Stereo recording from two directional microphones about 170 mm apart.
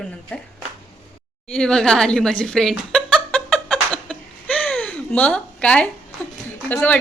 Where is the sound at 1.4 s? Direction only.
5° left (ahead or behind).